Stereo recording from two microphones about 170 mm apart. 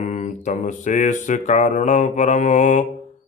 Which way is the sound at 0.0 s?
45° left (ahead or behind).